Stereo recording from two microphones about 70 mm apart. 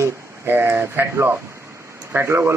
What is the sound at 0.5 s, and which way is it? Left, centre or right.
Speech, right.